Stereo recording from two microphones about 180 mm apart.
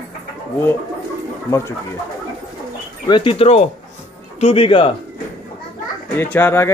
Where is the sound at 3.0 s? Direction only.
30° left (ahead or behind).